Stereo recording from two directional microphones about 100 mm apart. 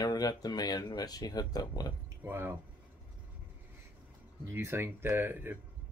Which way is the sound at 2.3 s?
20° right (ahead or behind).